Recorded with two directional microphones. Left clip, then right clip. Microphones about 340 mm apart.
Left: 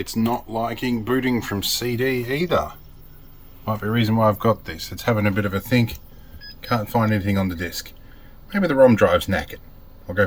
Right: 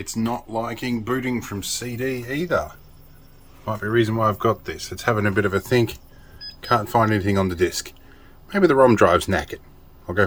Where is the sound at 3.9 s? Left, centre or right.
Centre.